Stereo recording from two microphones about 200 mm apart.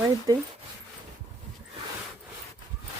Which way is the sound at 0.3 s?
20° right (ahead or behind).